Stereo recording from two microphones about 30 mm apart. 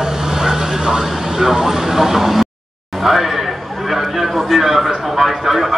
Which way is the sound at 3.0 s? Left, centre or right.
Centre.